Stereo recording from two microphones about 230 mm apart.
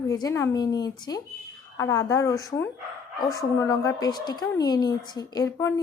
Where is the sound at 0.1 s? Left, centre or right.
Centre.